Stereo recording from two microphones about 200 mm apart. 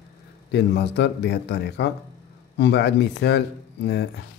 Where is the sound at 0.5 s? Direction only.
60° left (ahead or behind).